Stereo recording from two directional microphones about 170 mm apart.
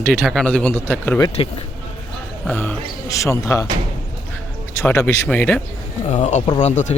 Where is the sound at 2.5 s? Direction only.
10° left (ahead or behind).